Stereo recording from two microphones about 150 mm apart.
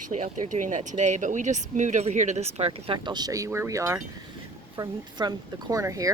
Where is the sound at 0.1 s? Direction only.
55° right (ahead or behind).